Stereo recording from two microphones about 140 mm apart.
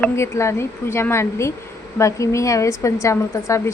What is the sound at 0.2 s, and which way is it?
A woman's voice, 20° left (ahead or behind).